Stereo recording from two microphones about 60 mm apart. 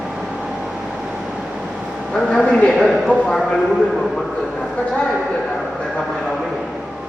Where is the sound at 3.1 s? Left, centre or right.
Centre.